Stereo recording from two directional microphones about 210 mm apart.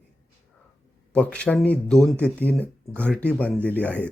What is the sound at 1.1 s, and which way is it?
Speech, 5° left (ahead or behind).